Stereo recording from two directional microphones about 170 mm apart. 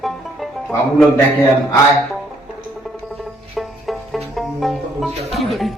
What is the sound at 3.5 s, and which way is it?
Music, centre (ahead or behind).